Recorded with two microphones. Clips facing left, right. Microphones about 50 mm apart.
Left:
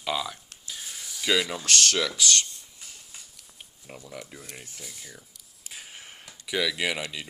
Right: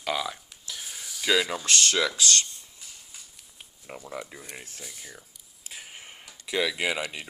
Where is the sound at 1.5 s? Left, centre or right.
Right.